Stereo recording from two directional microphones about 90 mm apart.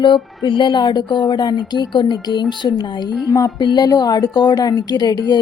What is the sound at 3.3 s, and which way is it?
Speech, 40° left (ahead or behind).